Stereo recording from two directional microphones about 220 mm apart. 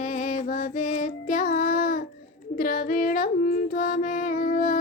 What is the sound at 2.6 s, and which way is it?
Female singing, 40° left (ahead or behind).